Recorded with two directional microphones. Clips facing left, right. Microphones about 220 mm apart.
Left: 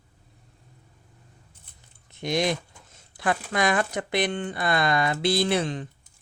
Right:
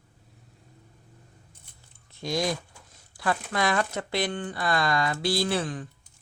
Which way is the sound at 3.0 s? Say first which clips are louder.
Left 2 dB; 20° left (ahead or behind).